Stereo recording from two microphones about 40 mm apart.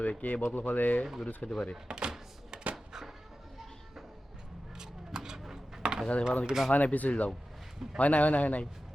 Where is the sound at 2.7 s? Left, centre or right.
Centre.